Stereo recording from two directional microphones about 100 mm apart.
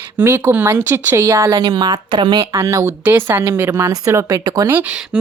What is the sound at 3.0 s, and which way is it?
Speech, 20° right (ahead or behind).